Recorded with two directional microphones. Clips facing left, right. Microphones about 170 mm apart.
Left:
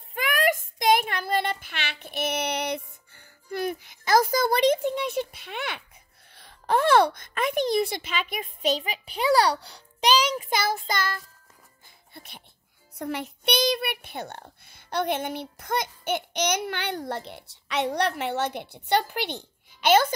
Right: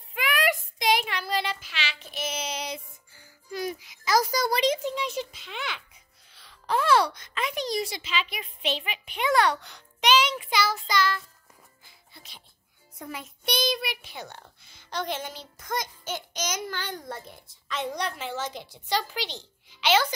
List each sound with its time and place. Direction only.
0.1 s child singing: 45° left (ahead or behind)
6.3 s a sound: 50° left (ahead or behind)
12.9 s child singing: 70° left (ahead or behind); by 20.1 s 50° left (ahead or behind)